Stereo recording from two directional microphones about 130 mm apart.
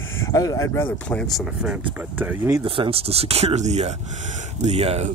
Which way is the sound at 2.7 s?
45° right (ahead or behind).